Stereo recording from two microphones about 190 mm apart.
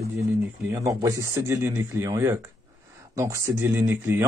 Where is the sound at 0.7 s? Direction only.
15° right (ahead or behind).